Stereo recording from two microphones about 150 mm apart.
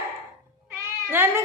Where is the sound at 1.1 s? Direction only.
15° right (ahead or behind).